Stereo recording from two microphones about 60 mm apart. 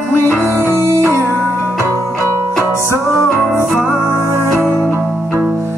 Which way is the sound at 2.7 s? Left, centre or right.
Left.